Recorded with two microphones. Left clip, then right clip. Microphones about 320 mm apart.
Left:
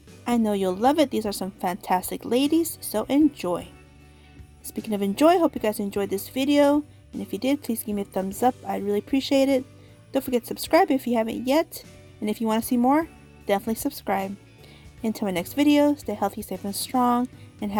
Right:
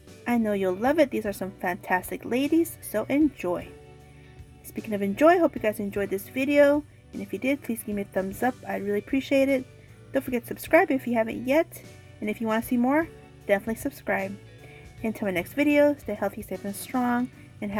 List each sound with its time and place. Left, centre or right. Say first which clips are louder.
0.3 s a woman's voice: left 2 dB; left
4.7 s a woman's voice: left 2 dB; left